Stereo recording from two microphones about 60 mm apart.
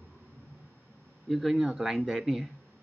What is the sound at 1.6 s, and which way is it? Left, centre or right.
Speech, centre.